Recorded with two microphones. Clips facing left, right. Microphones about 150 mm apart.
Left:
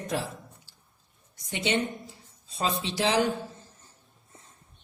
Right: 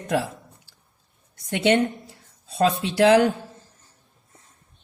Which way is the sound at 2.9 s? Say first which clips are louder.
Right 11 dB; 60° right (ahead or behind).